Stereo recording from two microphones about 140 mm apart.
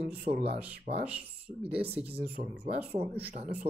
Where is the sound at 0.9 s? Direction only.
60° right (ahead or behind).